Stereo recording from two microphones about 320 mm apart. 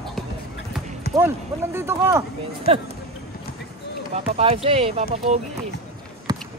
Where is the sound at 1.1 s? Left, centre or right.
Centre.